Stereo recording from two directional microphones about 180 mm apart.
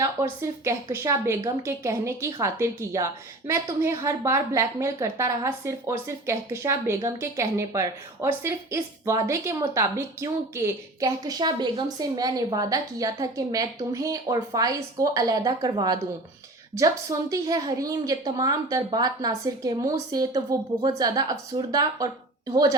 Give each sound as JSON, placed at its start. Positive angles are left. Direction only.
{"t": 0.0, "sound": "a woman's voice", "side_deg": -15}